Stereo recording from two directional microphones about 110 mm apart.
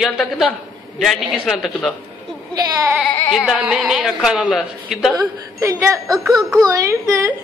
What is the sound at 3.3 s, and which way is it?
A woman's voice, 5° right (ahead or behind).